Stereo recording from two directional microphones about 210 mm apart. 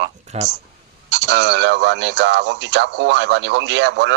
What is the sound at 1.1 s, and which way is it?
Speech, 55° right (ahead or behind).